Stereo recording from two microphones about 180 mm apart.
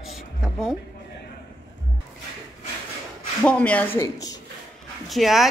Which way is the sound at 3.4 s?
5° left (ahead or behind).